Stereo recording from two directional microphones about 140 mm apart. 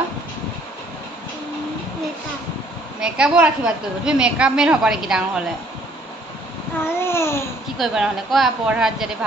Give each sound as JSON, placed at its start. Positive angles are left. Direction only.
{"t": 3.0, "sound": "a woman's voice", "side_deg": -5}
{"t": 7.0, "sound": "babbling", "side_deg": 20}
{"t": 7.7, "sound": "a woman's voice", "side_deg": 0}